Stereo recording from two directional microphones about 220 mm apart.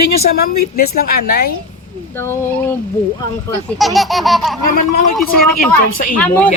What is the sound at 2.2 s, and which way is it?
Speech, 10° left (ahead or behind).